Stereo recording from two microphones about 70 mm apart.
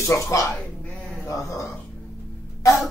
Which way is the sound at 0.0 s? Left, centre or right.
Left.